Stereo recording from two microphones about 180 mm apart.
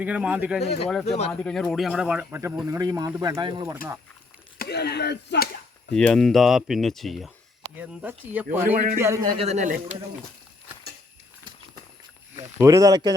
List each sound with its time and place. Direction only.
0.0 s speech: 10° right (ahead or behind)
1.0 s speech: 35° left (ahead or behind)
1.3 s speech: 5° left (ahead or behind); by 3.8 s 20° right (ahead or behind)
4.5 s speech: 60° left (ahead or behind)
5.9 s speech: 5° left (ahead or behind)
8.7 s a man's voice: 40° right (ahead or behind)
9.0 s speech: 15° right (ahead or behind)
9.4 s speech: 40° right (ahead or behind)
12.5 s speech: 15° right (ahead or behind)